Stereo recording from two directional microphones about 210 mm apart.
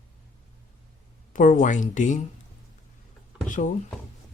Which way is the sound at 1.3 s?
35° left (ahead or behind).